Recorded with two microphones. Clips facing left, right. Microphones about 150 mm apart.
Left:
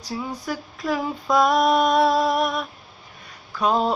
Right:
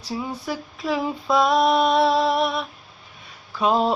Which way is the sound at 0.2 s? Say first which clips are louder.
Even; 5° right (ahead or behind).